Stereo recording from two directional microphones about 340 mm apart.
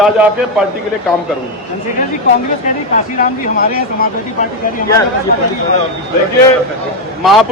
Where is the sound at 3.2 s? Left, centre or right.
Left.